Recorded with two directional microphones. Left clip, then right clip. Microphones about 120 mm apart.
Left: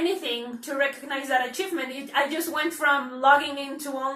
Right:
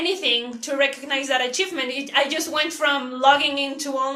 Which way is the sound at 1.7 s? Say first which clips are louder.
Right 2 dB; 15° right (ahead or behind).